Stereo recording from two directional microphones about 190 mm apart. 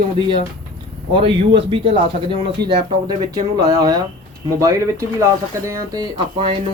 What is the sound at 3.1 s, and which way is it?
Speech, 20° right (ahead or behind).